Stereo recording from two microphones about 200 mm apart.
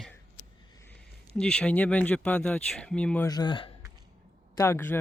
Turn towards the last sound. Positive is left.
turn(degrees=10)  # may be behind; listen again after turning